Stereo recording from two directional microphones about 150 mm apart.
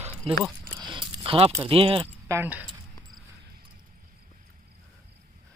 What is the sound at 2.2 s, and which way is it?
Speech, 15° right (ahead or behind).